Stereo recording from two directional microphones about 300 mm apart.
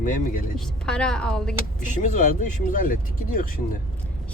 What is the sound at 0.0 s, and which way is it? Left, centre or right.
Speech, left.